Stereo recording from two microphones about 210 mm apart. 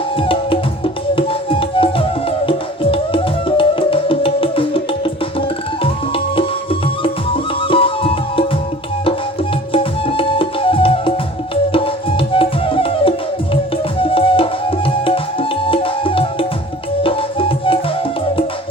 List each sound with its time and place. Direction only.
0.2 s music: 25° left (ahead or behind)
9.7 s music: 25° left (ahead or behind)
14.0 s tabla: 25° left (ahead or behind)
17.0 s music: 25° left (ahead or behind)